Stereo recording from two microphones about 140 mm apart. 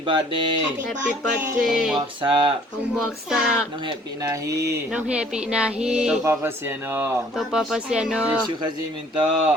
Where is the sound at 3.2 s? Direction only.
5° right (ahead or behind).